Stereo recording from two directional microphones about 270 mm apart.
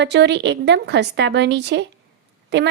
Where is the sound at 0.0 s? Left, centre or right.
Right.